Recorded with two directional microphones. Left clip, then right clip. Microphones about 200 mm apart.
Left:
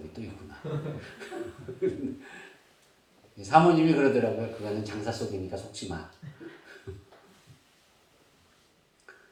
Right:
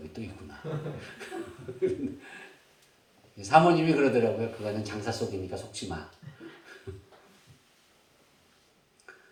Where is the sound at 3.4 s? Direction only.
45° right (ahead or behind).